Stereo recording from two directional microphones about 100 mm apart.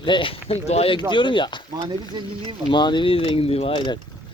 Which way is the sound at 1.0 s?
50° left (ahead or behind).